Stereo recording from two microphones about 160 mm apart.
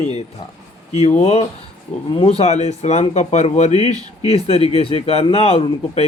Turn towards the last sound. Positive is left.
turn(degrees=40)  # may be behind; listen again after turning